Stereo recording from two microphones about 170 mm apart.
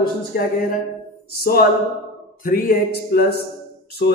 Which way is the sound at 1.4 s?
65° left (ahead or behind).